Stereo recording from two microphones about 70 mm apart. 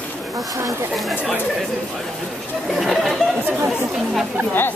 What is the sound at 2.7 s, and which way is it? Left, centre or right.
Speech, centre.